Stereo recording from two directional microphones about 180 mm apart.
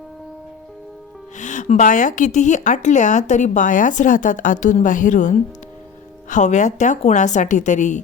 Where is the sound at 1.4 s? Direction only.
45° left (ahead or behind).